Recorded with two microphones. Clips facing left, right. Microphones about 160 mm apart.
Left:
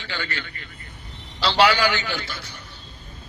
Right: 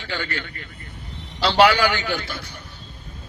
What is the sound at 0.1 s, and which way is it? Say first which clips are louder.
A man's voice: right 3 dB; 50° right (ahead or behind).